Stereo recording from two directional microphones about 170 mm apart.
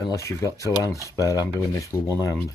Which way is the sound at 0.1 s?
20° left (ahead or behind).